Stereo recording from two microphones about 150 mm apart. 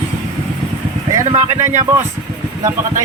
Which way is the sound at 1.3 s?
45° right (ahead or behind).